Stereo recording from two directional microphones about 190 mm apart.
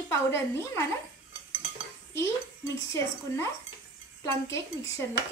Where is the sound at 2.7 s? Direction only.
15° left (ahead or behind).